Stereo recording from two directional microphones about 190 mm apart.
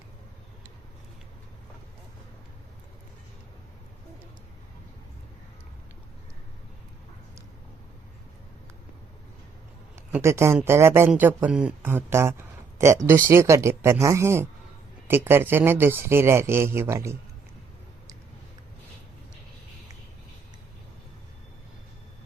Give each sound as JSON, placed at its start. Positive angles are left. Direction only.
{"t": 9.9, "sound": "a man's voice", "side_deg": -15}